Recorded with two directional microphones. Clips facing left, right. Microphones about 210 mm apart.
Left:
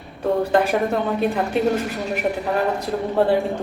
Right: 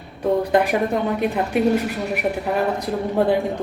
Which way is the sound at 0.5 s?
15° right (ahead or behind).